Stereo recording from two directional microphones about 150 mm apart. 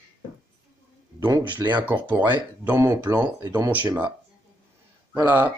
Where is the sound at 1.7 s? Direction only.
10° right (ahead or behind).